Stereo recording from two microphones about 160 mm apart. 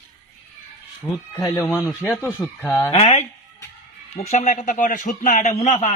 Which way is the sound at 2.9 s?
45° left (ahead or behind).